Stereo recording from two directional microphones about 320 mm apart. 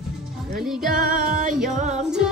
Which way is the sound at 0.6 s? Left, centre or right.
Centre.